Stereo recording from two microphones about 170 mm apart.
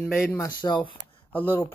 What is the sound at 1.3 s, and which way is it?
Speech, 10° left (ahead or behind).